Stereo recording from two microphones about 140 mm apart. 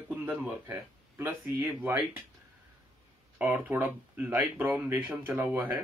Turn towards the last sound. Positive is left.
turn(degrees=-15)  # may be behind; listen again after turning